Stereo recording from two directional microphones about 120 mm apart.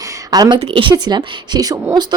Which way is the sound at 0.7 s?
45° right (ahead or behind).